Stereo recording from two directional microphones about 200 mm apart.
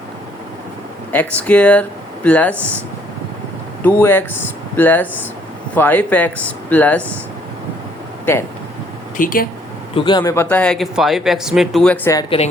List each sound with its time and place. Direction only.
1.1 s speech: 10° left (ahead or behind)
3.8 s speech: 10° left (ahead or behind)
8.2 s speech: 10° left (ahead or behind)
9.1 s speech: 45° left (ahead or behind)
9.9 s speech: 25° left (ahead or behind)
10.3 s speech: 10° left (ahead or behind)